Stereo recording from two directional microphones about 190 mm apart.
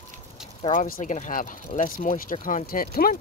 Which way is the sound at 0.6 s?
45° left (ahead or behind).